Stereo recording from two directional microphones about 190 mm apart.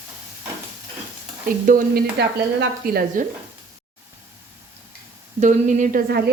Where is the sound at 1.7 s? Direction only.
50° right (ahead or behind).